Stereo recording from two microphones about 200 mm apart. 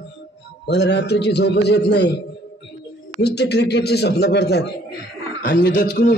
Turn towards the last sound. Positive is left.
turn(degrees=60)  # may be behind; listen again after turning